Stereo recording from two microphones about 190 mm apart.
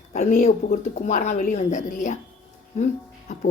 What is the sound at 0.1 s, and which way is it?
Speech, 40° left (ahead or behind).